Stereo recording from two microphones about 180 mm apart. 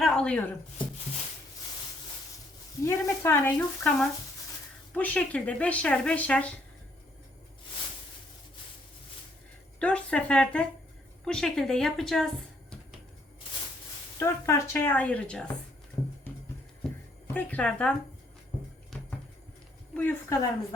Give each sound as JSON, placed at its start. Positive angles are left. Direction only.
{"t": 0.0, "sound": "a sound", "side_deg": 5}
{"t": 2.8, "sound": "speech", "side_deg": 10}
{"t": 9.8, "sound": "a woman's voice", "side_deg": 5}
{"t": 14.2, "sound": "speech", "side_deg": 15}
{"t": 16.0, "sound": "music", "side_deg": 15}
{"t": 16.8, "sound": "a sound", "side_deg": 5}
{"t": 17.3, "sound": "speech", "side_deg": 5}
{"t": 19.9, "sound": "speech", "side_deg": 10}